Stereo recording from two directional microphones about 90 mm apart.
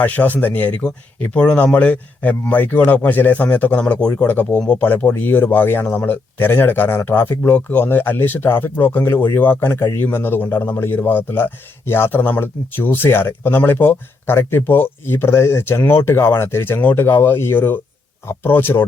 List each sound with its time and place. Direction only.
0.0 s speech: 20° left (ahead or behind)